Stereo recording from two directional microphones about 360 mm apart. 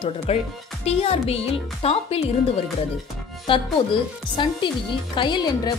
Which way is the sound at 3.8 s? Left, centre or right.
Centre.